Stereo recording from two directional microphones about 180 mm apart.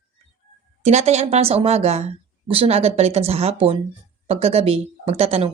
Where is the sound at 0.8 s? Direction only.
35° right (ahead or behind).